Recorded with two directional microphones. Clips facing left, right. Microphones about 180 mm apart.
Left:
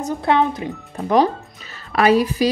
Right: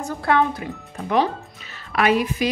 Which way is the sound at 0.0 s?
20° left (ahead or behind).